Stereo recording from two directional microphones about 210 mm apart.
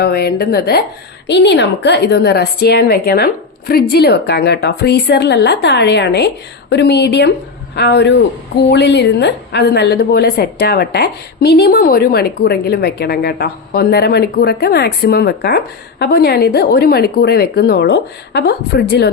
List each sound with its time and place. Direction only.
0.0 s a woman's voice: 50° left (ahead or behind)